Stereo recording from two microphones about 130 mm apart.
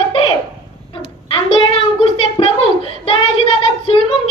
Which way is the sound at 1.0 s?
45° left (ahead or behind).